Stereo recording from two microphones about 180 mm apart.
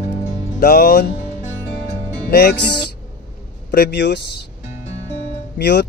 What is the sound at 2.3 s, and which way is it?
A man's voice, 65° left (ahead or behind).